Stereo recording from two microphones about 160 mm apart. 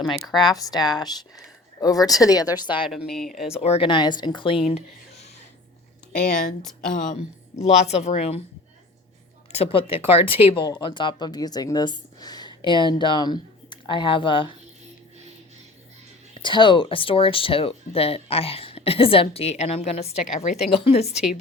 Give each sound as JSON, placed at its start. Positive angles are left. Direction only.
{"t": 0.3, "sound": "speech", "side_deg": 25}
{"t": 2.8, "sound": "speech", "side_deg": -5}
{"t": 3.5, "sound": "speech", "side_deg": 40}
{"t": 6.9, "sound": "a woman's voice", "side_deg": 50}
{"t": 9.5, "sound": "speech", "side_deg": 40}
{"t": 16.4, "sound": "a woman's voice", "side_deg": 30}
{"t": 20.7, "sound": "speech", "side_deg": 35}